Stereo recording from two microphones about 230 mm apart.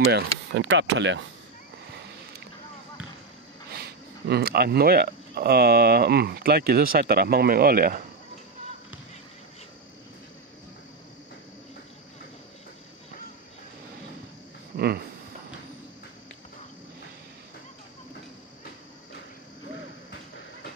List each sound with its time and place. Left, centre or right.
0.1 s speech: right
4.3 s speech: right
14.8 s speech: right